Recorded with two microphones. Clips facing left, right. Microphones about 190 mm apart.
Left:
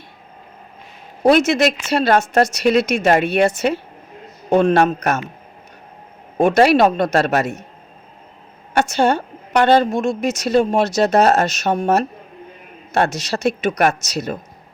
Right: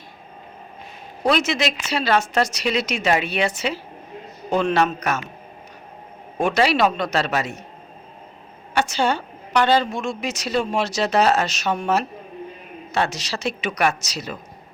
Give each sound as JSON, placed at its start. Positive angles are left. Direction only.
{"t": 1.3, "sound": "speech", "side_deg": 50}
{"t": 6.3, "sound": "speech", "side_deg": 45}
{"t": 8.7, "sound": "a woman's voice", "side_deg": 45}